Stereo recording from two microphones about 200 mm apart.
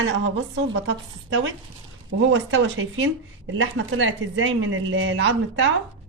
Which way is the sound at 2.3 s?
70° right (ahead or behind).